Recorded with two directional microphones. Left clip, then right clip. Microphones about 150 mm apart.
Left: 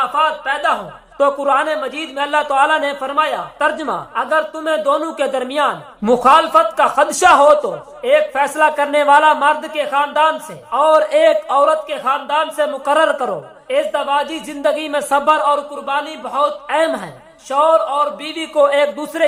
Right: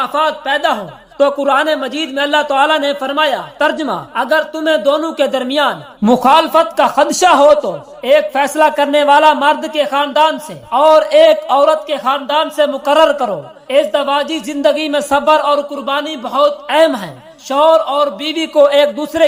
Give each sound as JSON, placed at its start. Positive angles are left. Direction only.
{"t": 0.0, "sound": "a man's voice", "side_deg": -45}
{"t": 1.2, "sound": "a man's voice", "side_deg": -15}
{"t": 1.5, "sound": "a man's voice", "side_deg": -30}
{"t": 4.1, "sound": "a man's voice", "side_deg": -35}
{"t": 7.1, "sound": "a man's voice", "side_deg": -15}
{"t": 8.0, "sound": "a man's voice", "side_deg": -35}
{"t": 13.7, "sound": "a woman's voice", "side_deg": -35}